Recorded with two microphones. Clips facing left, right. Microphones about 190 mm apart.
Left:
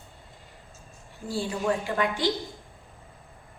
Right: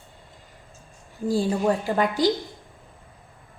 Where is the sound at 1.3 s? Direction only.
40° right (ahead or behind).